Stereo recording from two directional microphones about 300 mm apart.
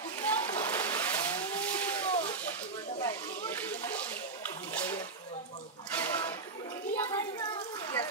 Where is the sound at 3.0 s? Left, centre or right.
Centre.